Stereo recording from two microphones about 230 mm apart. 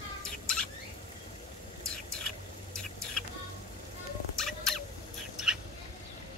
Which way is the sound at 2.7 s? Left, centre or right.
Centre.